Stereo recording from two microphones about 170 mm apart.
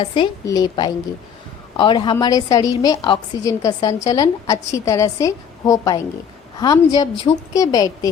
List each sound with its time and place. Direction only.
0.0 s a woman's voice: 30° left (ahead or behind)